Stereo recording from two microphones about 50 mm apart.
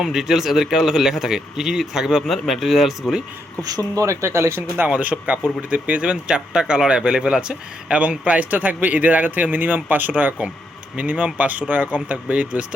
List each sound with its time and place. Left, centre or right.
0.0 s speech: centre
4.0 s speech: right
4.9 s speech: right